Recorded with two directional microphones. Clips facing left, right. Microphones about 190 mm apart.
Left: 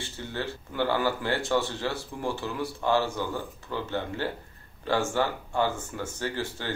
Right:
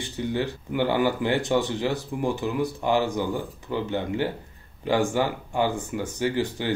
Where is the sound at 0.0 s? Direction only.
15° right (ahead or behind).